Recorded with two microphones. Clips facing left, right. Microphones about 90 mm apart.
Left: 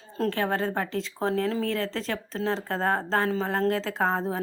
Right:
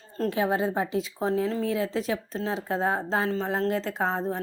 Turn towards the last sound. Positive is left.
turn(degrees=0)  # may be behind; listen again after turning